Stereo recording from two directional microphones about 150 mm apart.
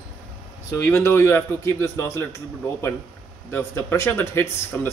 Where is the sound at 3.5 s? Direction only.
15° left (ahead or behind).